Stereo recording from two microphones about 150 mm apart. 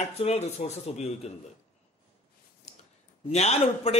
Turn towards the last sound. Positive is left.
turn(degrees=45)  # may be behind; listen again after turning